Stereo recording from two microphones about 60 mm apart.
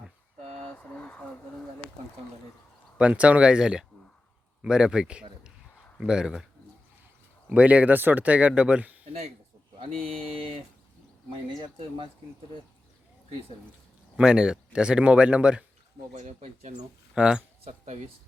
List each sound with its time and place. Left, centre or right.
0.8 s a sound: left
3.0 s speech: right
7.5 s speech: right
14.2 s speech: centre
17.2 s speech: centre